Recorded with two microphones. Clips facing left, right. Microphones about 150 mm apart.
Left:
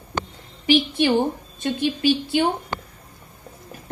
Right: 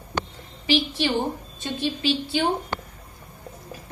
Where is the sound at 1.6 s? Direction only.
55° left (ahead or behind).